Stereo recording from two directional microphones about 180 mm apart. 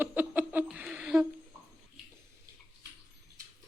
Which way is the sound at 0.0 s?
10° right (ahead or behind).